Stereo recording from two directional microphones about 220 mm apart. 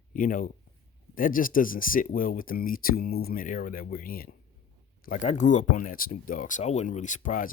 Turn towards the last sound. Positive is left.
turn(degrees=35)  # may be behind; listen again after turning